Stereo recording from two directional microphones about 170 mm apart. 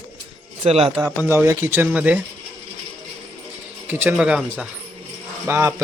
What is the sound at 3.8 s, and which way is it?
Speech, 10° right (ahead or behind).